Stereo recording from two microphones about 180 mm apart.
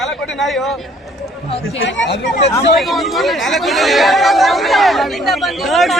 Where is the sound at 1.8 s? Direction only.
90° left.